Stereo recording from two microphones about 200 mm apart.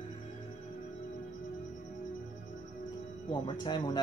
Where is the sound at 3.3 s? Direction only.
20° left (ahead or behind).